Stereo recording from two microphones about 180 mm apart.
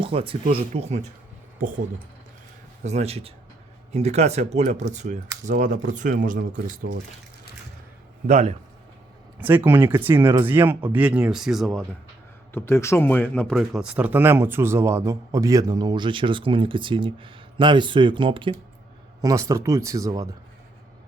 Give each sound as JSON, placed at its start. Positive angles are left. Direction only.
{"t": 0.0, "sound": "speech", "side_deg": -30}
{"t": 2.8, "sound": "speech", "side_deg": -35}
{"t": 8.3, "sound": "speech", "side_deg": -50}
{"t": 9.6, "sound": "speech", "side_deg": -10}
{"t": 12.5, "sound": "speech", "side_deg": 15}